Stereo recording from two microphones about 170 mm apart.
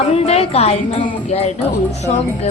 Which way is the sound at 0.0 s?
35° left (ahead or behind).